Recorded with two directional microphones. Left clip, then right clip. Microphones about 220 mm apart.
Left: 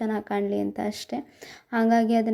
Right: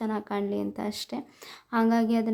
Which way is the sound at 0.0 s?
10° left (ahead or behind).